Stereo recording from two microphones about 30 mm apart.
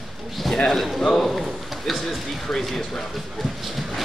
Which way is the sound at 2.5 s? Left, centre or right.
Centre.